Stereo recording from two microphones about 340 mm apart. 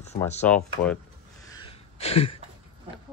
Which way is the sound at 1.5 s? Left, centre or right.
Centre.